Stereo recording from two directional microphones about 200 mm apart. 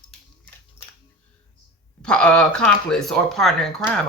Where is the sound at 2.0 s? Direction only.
5° left (ahead or behind).